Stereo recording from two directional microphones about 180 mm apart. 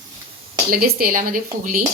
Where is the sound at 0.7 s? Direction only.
55° right (ahead or behind).